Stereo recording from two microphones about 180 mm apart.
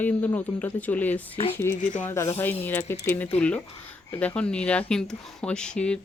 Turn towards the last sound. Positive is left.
turn(degrees=5)  # may be behind; listen again after turning